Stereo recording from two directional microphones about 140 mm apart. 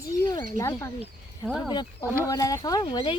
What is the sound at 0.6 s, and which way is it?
Speech, 20° left (ahead or behind).